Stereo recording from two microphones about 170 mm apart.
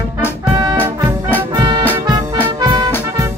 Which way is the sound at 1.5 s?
25° right (ahead or behind).